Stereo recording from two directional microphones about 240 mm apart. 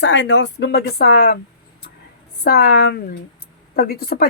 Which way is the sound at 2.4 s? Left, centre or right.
Left.